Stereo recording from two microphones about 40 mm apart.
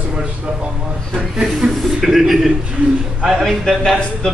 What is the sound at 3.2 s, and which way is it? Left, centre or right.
Speech, centre.